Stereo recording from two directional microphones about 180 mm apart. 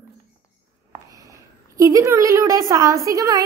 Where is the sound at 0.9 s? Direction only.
20° right (ahead or behind).